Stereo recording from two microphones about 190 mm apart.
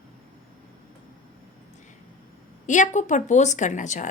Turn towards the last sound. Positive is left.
turn(degrees=40)  # may be behind; listen again after turning